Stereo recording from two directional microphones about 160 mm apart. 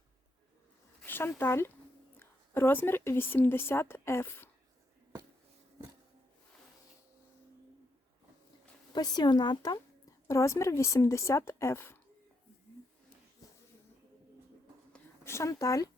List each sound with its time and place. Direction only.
1.0 s speech: 15° left (ahead or behind)
8.9 s a woman's voice: 25° left (ahead or behind)
14.9 s a sound: 15° left (ahead or behind)